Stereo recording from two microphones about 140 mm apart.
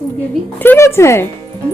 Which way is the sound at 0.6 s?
15° left (ahead or behind).